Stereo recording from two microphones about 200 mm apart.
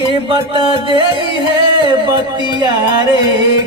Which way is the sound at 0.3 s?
25° right (ahead or behind).